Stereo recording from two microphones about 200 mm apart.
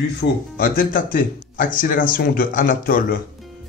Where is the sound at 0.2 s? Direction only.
45° left (ahead or behind).